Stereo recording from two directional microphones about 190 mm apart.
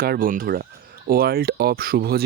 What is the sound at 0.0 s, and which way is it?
Speech, 50° right (ahead or behind).